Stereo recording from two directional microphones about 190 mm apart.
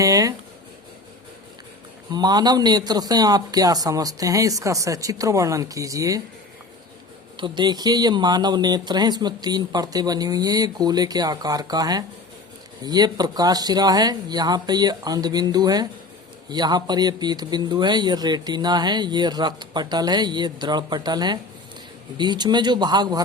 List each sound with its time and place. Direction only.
0.0 s speech: 15° right (ahead or behind)
2.1 s speech: 20° right (ahead or behind)
7.3 s speech: 25° right (ahead or behind)